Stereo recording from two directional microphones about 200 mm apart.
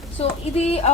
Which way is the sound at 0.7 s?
30° left (ahead or behind).